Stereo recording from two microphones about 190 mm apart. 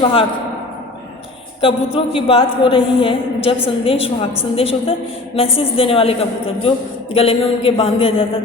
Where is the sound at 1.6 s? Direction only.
30° left (ahead or behind).